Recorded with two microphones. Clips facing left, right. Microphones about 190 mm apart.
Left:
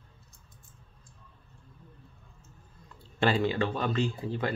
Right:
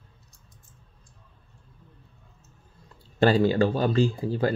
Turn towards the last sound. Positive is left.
turn(degrees=-35)  # may be behind; listen again after turning